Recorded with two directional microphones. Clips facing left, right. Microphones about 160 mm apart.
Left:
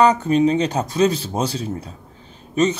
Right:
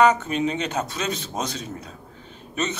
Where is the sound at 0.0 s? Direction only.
35° left (ahead or behind).